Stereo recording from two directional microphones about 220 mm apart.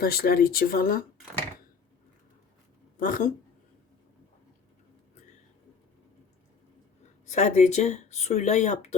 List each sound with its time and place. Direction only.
0.0 s speech: 45° left (ahead or behind)
3.0 s speech: 40° left (ahead or behind)
7.3 s speech: 30° left (ahead or behind)